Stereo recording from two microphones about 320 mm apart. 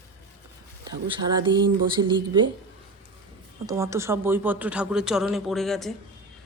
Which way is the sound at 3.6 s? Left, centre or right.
Centre.